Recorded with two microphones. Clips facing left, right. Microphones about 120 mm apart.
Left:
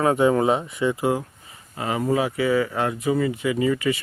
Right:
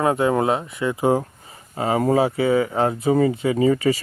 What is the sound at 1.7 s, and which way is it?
Speech, 30° right (ahead or behind).